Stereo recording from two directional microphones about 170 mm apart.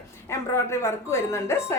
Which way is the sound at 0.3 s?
15° left (ahead or behind).